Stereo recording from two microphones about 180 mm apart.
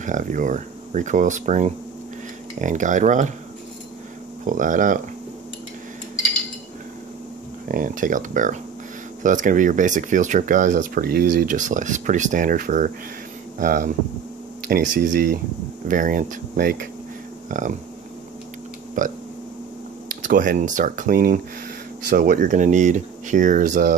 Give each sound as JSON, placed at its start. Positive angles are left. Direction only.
{"t": 0.0, "sound": "speech", "side_deg": -45}
{"t": 4.5, "sound": "speech", "side_deg": -45}
{"t": 7.6, "sound": "speech", "side_deg": -50}
{"t": 17.5, "sound": "speech", "side_deg": -45}
{"t": 19.0, "sound": "speech", "side_deg": -45}